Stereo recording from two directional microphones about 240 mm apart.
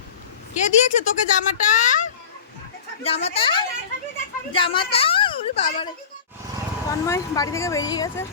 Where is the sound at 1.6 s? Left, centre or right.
Left.